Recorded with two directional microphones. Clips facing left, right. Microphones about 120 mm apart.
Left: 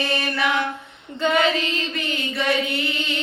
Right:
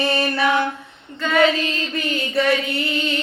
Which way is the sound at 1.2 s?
20° left (ahead or behind).